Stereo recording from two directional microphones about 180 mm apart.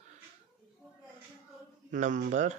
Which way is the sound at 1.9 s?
45° right (ahead or behind).